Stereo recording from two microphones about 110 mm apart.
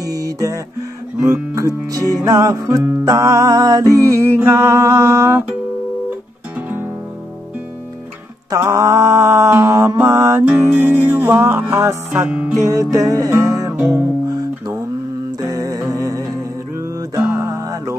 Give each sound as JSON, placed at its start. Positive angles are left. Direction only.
{"t": 0.0, "sound": "speech", "side_deg": -30}
{"t": 3.1, "sound": "mantra", "side_deg": -30}
{"t": 8.5, "sound": "mantra", "side_deg": -30}
{"t": 12.1, "sound": "music", "side_deg": -15}
{"t": 12.6, "sound": "music", "side_deg": -35}
{"t": 15.4, "sound": "music", "side_deg": -35}